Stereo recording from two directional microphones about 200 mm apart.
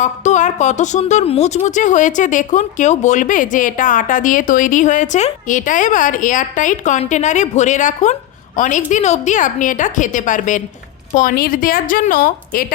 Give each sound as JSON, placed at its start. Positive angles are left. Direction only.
{"t": 0.0, "sound": "a woman's voice", "side_deg": 35}